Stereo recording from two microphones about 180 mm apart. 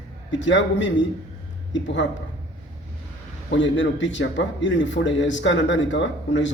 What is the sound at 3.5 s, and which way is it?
A man's voice, 90° left.